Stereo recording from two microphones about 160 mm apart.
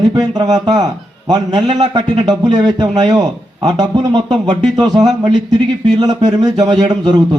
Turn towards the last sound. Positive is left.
turn(degrees=-25)  # may be behind; listen again after turning